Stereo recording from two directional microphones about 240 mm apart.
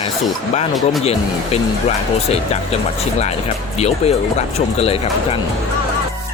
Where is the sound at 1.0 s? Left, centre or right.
Left.